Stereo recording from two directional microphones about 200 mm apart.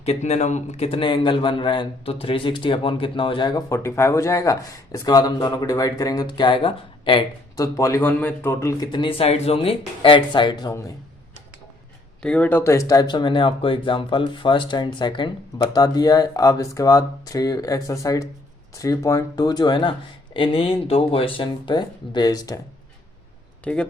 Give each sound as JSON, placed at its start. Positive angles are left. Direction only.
{"t": 0.0, "sound": "speech", "side_deg": 30}
{"t": 12.2, "sound": "speech", "side_deg": 5}
{"t": 23.7, "sound": "speech", "side_deg": 5}